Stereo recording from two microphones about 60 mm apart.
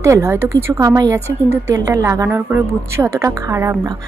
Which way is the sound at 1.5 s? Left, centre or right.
Right.